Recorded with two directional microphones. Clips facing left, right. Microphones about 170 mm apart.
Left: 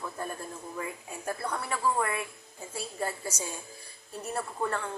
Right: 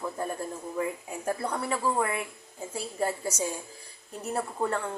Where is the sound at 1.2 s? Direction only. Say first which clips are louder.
Right 4 dB; 15° right (ahead or behind).